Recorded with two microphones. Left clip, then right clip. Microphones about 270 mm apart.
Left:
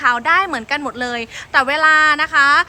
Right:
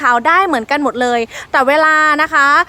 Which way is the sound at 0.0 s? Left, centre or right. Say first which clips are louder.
Right 4 dB; right.